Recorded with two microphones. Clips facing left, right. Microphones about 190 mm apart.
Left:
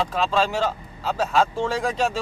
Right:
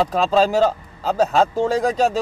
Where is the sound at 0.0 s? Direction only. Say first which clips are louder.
Right 5 dB; 40° right (ahead or behind).